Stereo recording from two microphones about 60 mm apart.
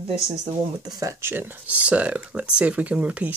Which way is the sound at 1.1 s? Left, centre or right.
Right.